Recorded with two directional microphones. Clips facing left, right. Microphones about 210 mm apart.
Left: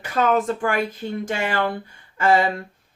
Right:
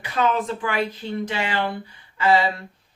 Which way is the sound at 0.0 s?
45° left (ahead or behind).